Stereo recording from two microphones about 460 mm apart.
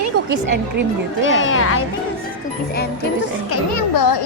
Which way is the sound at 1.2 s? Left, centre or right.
Left.